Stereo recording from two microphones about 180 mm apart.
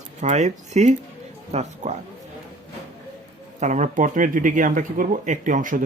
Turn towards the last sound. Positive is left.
turn(degrees=-45)  # may be behind; listen again after turning